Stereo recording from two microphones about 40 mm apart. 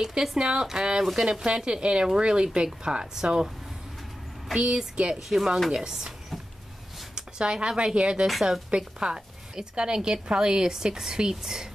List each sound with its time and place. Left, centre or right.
0.0 s a woman's voice: centre
4.6 s a woman's voice: centre
5.1 s speech: centre
5.9 s drawer open or close: centre
7.2 s a woman's voice: centre